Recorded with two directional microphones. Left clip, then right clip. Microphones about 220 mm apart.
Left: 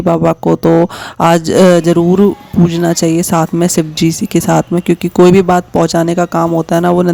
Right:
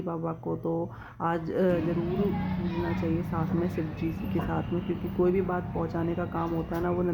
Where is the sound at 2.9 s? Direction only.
50° left (ahead or behind).